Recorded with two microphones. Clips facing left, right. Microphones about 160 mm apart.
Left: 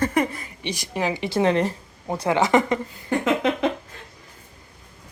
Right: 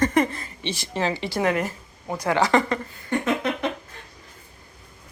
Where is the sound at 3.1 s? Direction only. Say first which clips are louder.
Left 3 dB; 90° left.